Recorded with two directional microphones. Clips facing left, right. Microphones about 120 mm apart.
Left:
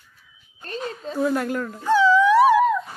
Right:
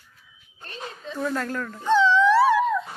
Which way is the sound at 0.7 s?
40° left (ahead or behind).